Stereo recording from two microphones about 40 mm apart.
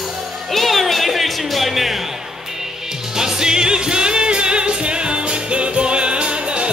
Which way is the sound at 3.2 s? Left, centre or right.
Centre.